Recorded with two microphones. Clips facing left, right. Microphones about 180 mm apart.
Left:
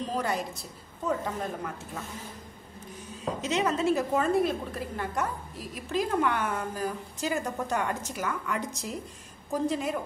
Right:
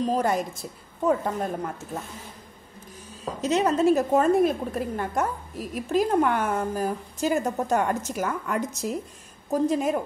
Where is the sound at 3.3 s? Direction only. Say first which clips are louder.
Right 6 dB; 40° right (ahead or behind).